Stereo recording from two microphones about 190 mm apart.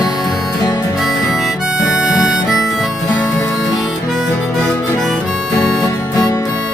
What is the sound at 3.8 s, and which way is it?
Harmonica, centre (ahead or behind).